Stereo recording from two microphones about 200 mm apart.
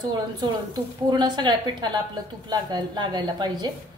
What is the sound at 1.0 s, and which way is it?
A woman's voice, 20° right (ahead or behind).